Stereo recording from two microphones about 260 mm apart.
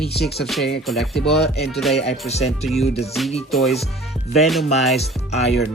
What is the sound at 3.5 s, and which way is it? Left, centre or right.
Speech, centre.